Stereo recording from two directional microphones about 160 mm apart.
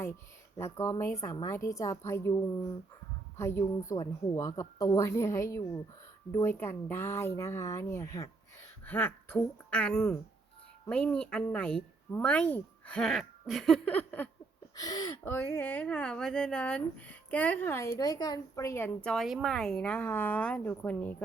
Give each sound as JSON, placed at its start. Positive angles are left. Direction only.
{"t": 0.6, "sound": "a woman's voice", "side_deg": 15}
{"t": 3.3, "sound": "a woman's voice", "side_deg": 15}
{"t": 14.8, "sound": "a woman's voice", "side_deg": 25}